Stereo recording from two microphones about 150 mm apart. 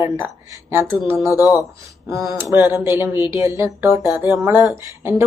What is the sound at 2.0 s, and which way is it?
A woman's voice, 20° right (ahead or behind).